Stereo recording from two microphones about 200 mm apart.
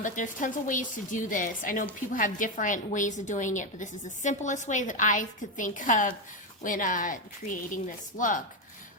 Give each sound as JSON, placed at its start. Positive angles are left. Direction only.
{"t": 0.0, "sound": "a woman's voice", "side_deg": 40}